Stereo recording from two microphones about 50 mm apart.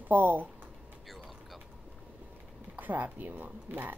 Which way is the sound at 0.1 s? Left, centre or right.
Right.